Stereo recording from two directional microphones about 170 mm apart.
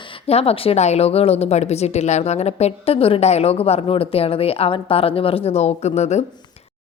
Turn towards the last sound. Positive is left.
turn(degrees=40)  # may be behind; listen again after turning